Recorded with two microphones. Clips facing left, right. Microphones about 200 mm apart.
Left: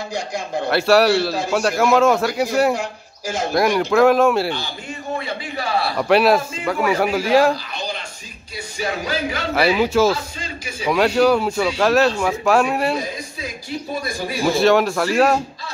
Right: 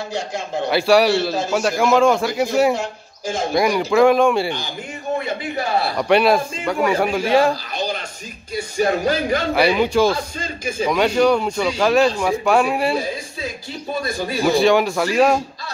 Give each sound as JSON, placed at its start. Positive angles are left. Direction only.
{"t": 0.7, "sound": "a man's voice", "side_deg": 0}
{"t": 5.6, "sound": "a man's voice", "side_deg": -20}
{"t": 5.9, "sound": "a man's voice", "side_deg": 0}
{"t": 8.7, "sound": "speech", "side_deg": -50}
{"t": 9.6, "sound": "a man's voice", "side_deg": 5}
{"t": 10.1, "sound": "speech", "side_deg": -50}
{"t": 10.9, "sound": "a man's voice", "side_deg": 5}
{"t": 14.4, "sound": "a man's voice", "side_deg": 0}